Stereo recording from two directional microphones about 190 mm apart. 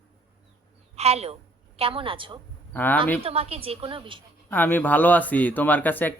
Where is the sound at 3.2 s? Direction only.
30° right (ahead or behind).